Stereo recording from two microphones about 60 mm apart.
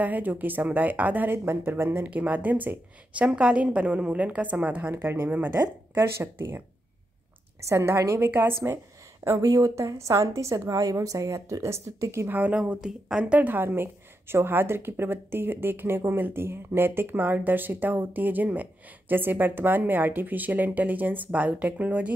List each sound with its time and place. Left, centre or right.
0.0 s a woman's voice: right
2.0 s a woman's voice: right
4.9 s a woman's voice: right
5.3 s a woman's voice: right
5.9 s a woman's voice: right
7.6 s a woman's voice: right
8.3 s a woman's voice: right
9.4 s a woman's voice: right
9.8 s a woman's voice: right
12.3 s a woman's voice: right
13.3 s a woman's voice: right